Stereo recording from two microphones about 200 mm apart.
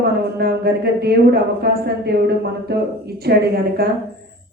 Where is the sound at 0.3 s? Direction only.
50° right (ahead or behind).